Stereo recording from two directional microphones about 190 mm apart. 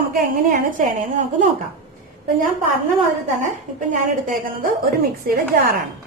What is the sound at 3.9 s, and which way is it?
Speech, 45° right (ahead or behind).